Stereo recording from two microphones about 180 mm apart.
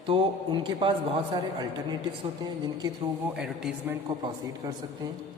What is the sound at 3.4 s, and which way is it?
Speech, 5° right (ahead or behind).